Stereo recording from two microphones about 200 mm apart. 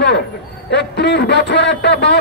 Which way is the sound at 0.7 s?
55° left (ahead or behind).